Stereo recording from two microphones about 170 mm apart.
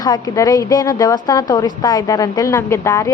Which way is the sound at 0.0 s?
20° left (ahead or behind).